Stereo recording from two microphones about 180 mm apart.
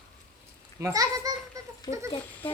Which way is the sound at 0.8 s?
15° right (ahead or behind).